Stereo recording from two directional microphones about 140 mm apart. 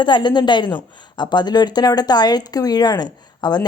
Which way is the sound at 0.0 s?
35° left (ahead or behind).